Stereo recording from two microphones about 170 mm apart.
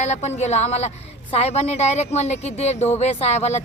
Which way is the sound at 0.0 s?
40° left (ahead or behind).